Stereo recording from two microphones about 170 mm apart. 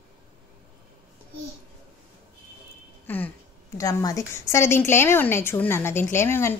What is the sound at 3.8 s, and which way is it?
A woman's voice, 20° left (ahead or behind).